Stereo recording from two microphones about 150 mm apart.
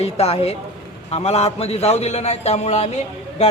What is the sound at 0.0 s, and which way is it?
Speech, 45° left (ahead or behind).